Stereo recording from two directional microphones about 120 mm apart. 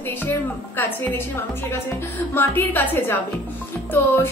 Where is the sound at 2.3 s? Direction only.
20° left (ahead or behind).